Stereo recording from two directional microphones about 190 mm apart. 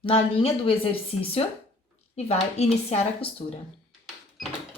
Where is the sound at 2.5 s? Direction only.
35° left (ahead or behind).